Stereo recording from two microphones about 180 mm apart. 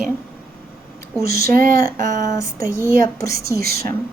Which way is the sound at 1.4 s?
55° right (ahead or behind).